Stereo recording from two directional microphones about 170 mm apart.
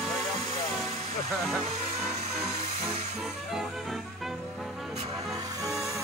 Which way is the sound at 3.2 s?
Centre (ahead or behind).